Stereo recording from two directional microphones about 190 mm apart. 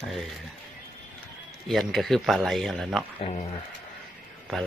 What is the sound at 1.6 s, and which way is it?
A man's voice, centre (ahead or behind).